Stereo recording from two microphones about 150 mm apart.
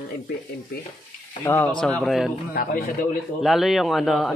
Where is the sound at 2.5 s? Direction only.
70° left (ahead or behind).